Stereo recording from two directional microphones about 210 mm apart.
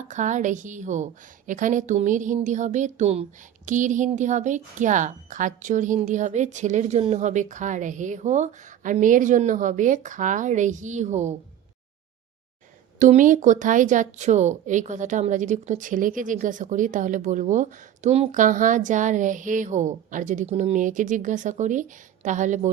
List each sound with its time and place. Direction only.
0.1 s speech: 35° right (ahead or behind)
13.0 s speech: 35° right (ahead or behind)